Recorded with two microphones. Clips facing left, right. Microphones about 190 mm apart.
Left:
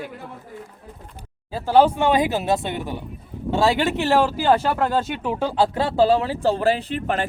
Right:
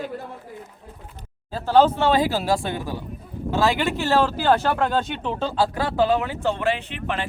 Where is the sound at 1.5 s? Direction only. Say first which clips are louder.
Left 1 dB; 10° left (ahead or behind).